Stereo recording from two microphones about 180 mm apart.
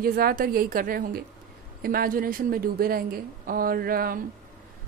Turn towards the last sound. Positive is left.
turn(degrees=-55)  # may be behind; listen again after turning